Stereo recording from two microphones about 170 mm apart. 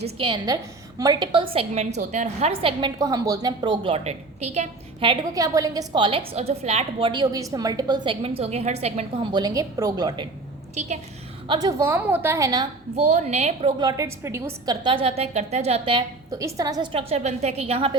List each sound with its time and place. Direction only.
0.0 s a woman's voice: 30° right (ahead or behind)
5.3 s a woman's voice: 20° right (ahead or behind); by 7.1 s 40° right (ahead or behind)
7.1 s a woman's voice: 25° right (ahead or behind); by 9.0 s 40° right (ahead or behind)
9.3 s a woman's voice: 20° right (ahead or behind)
10.8 s a woman's voice: 45° right (ahead or behind)
11.4 s a woman's voice: 25° right (ahead or behind)
13.0 s a woman's voice: 40° right (ahead or behind); by 14.8 s 15° right (ahead or behind)
14.8 s a woman's voice: 35° right (ahead or behind)
16.4 s a woman's voice: 20° right (ahead or behind)